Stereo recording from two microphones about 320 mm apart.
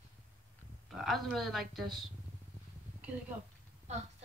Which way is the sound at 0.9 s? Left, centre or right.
Centre.